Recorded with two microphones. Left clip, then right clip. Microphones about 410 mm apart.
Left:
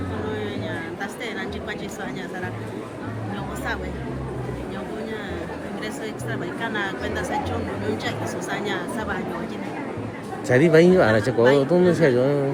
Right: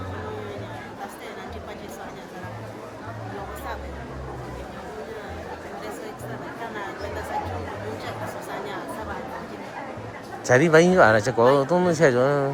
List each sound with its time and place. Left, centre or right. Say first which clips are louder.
10.4 s speech: left 1 dB; centre